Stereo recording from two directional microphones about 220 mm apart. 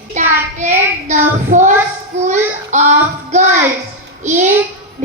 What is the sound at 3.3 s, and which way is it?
Speech, 30° right (ahead or behind).